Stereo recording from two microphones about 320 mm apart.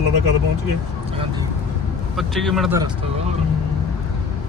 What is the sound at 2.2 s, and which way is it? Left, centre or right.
Speech, centre.